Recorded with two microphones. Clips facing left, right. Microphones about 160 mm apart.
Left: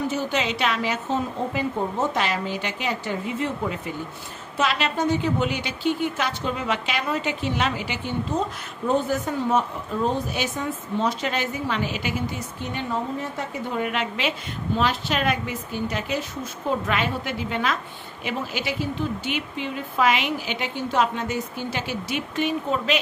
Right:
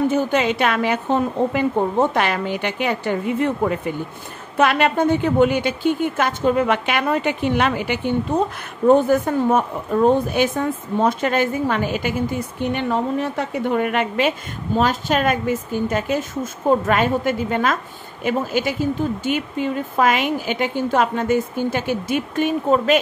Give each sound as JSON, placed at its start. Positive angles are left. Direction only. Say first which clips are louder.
{"t": 0.1, "sound": "a woman's voice", "louder": "right 7 dB", "side_deg": -50}